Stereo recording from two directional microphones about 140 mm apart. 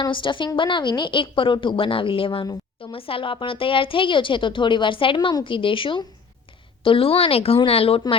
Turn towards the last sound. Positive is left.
turn(degrees=45)  # may be behind; listen again after turning